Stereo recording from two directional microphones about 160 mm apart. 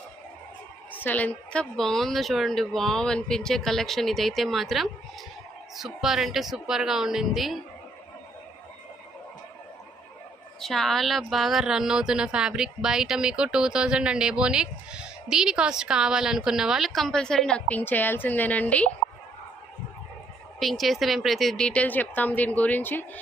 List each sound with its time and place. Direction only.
0.9 s a woman's voice: 10° left (ahead or behind)
10.6 s a woman's voice: centre (ahead or behind)
20.6 s speech: centre (ahead or behind)